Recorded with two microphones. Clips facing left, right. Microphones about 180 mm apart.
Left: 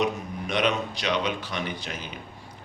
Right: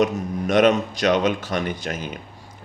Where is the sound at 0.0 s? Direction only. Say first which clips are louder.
Right 6 dB; 45° right (ahead or behind).